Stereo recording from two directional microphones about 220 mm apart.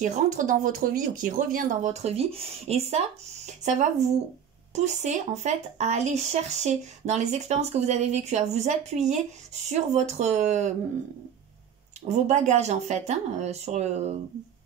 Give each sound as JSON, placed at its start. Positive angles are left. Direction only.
{"t": 0.0, "sound": "speech", "side_deg": -35}
{"t": 12.3, "sound": "speech", "side_deg": -30}